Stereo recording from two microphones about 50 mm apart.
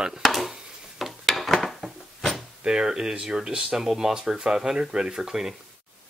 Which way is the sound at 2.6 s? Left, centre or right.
Centre.